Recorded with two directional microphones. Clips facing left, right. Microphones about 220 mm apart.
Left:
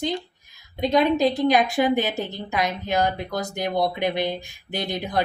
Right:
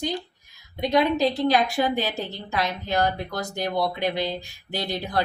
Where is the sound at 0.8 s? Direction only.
20° left (ahead or behind).